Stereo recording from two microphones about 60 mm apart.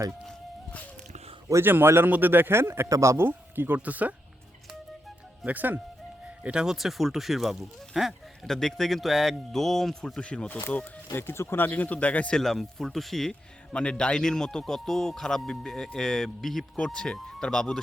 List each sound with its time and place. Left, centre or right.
1.6 s a man's voice: right
2.9 s speech: right
3.2 s speech: right
3.8 s speech: right
5.5 s speech: right
6.4 s speech: centre
6.7 s speech: centre
10.2 s speech: centre
11.1 s speech: left
12.4 s speech: centre
13.7 s speech: centre